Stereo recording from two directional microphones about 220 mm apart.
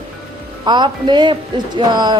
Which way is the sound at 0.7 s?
20° right (ahead or behind).